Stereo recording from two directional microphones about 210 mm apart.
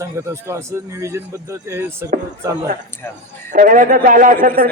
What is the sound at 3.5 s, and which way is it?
A man's voice, 40° right (ahead or behind).